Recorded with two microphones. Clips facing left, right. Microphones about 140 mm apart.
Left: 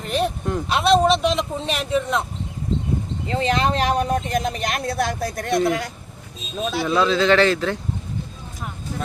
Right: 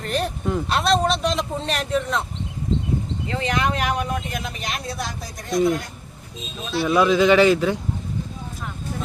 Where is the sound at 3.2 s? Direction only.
25° left (ahead or behind); by 5.6 s 70° left (ahead or behind).